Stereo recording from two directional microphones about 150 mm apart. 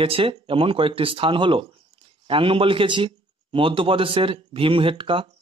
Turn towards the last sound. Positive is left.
turn(degrees=-35)  # may be behind; listen again after turning